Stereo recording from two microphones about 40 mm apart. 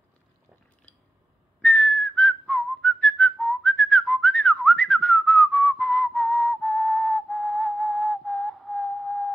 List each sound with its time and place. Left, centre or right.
1.6 s whistling: left
7.2 s music: centre